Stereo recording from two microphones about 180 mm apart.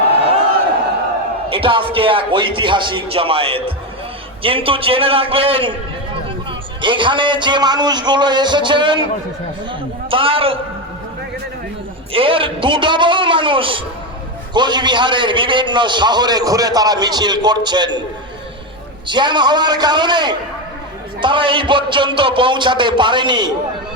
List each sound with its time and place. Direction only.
1.5 s a man's voice: 30° right (ahead or behind)
6.8 s a man's voice: 25° right (ahead or behind)
10.1 s a man's voice: 30° right (ahead or behind)
12.1 s a man's voice: 30° right (ahead or behind)
19.0 s a man's voice: 25° right (ahead or behind)